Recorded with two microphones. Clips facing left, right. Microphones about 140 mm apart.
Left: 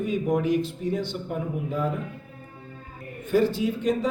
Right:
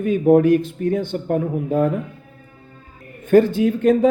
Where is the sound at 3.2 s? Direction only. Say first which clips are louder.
Right 8 dB; 55° right (ahead or behind).